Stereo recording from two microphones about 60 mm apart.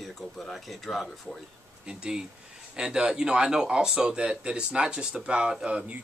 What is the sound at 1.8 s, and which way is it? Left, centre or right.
Speech, centre.